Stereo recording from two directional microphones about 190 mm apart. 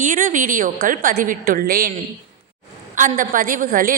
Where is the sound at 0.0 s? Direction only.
45° right (ahead or behind).